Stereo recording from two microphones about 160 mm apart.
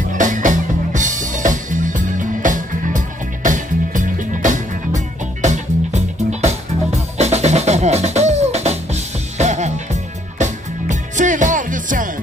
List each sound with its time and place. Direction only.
0.1 s music: 55° right (ahead or behind)